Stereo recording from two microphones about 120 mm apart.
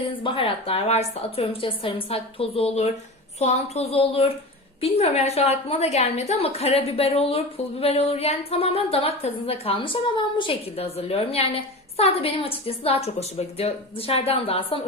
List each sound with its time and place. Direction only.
0.1 s a woman's voice: 45° left (ahead or behind)